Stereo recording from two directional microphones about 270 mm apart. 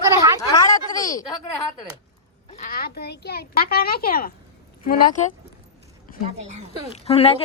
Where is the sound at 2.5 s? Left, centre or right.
Left.